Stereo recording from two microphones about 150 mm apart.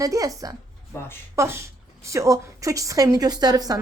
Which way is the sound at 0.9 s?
20° left (ahead or behind).